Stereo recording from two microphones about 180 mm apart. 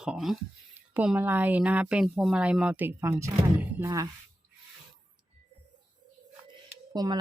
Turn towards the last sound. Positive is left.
turn(degrees=-20)  # may be behind; listen again after turning